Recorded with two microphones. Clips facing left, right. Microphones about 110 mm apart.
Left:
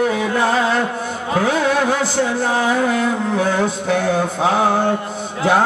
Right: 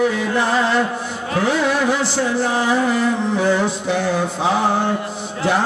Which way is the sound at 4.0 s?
50° left (ahead or behind).